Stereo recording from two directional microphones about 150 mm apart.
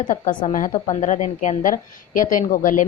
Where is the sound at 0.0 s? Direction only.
60° left (ahead or behind).